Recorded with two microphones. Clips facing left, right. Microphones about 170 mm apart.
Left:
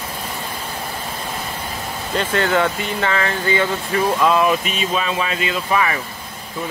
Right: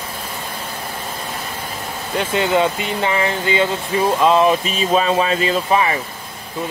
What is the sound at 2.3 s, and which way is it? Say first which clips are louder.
Speech: right 2 dB; 20° right (ahead or behind).